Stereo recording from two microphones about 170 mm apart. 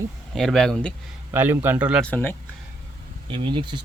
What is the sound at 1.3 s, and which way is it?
Speech, 10° right (ahead or behind).